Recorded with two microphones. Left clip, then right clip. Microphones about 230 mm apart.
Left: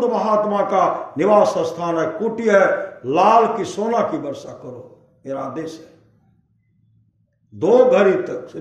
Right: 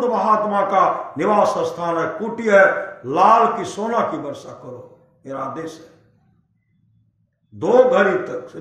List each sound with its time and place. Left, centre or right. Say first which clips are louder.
0.0 s a man's voice: even; centre
7.5 s a man's voice: left 1 dB; centre